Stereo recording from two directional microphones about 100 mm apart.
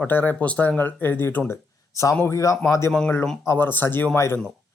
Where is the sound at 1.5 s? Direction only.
30° left (ahead or behind).